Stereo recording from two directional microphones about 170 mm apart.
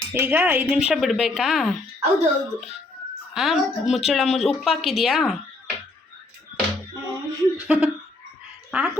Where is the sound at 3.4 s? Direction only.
Centre (ahead or behind).